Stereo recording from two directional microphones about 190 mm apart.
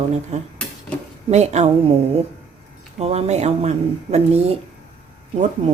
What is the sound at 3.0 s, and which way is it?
A woman's voice, 35° right (ahead or behind).